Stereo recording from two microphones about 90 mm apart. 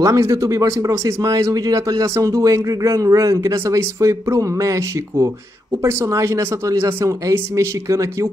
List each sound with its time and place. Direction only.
0.0 s a man's voice: 40° right (ahead or behind)